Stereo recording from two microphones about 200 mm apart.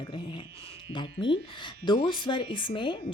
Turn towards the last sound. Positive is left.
turn(degrees=25)  # may be behind; listen again after turning